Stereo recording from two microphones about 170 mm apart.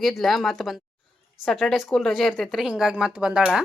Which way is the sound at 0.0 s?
Centre (ahead or behind).